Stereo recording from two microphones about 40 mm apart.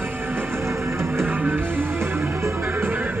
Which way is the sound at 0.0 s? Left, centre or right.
Right.